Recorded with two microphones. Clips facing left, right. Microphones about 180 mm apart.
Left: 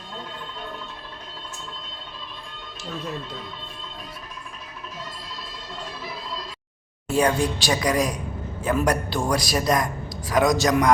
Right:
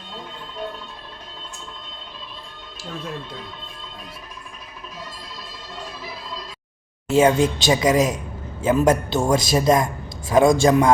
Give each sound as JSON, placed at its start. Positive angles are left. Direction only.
{"t": 7.1, "sound": "speech", "side_deg": -20}